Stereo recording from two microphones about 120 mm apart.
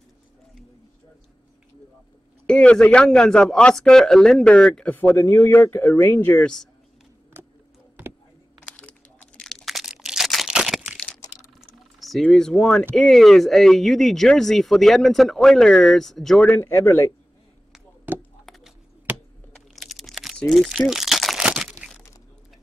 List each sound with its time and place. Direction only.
2.4 s speech: 10° left (ahead or behind)
4.9 s speech: 20° left (ahead or behind)
8.5 s a sound: 10° left (ahead or behind)
12.2 s speech: 5° left (ahead or behind); by 17.1 s 20° left (ahead or behind)
18.1 s chop: 15° right (ahead or behind)
18.4 s a sound: centre (ahead or behind)
20.3 s speech: 5° left (ahead or behind)
20.6 s crumpling: 5° right (ahead or behind)